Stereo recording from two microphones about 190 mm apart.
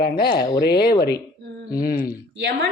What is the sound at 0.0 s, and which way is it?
Speech, 55° left (ahead or behind).